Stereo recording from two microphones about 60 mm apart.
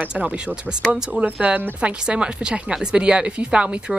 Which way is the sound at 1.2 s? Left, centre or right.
Right.